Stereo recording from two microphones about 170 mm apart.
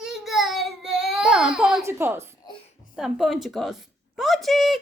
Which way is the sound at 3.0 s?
Centre (ahead or behind).